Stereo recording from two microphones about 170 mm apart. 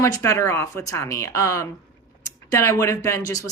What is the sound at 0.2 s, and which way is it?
Speech, 15° left (ahead or behind).